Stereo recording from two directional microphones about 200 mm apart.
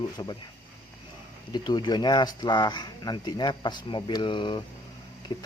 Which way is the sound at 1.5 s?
20° left (ahead or behind).